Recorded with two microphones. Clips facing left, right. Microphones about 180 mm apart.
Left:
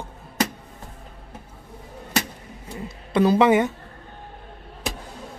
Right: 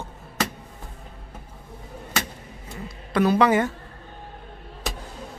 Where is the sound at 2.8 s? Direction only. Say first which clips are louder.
Left 2 dB; 25° left (ahead or behind).